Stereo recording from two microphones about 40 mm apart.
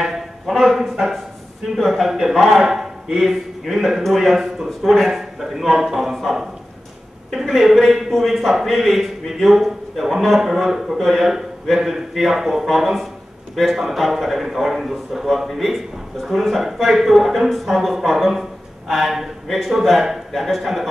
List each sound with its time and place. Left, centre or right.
0.0 s a man's voice: centre